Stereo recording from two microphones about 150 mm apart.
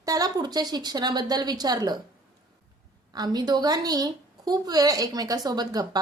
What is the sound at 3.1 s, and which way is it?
A woman's voice, 25° right (ahead or behind).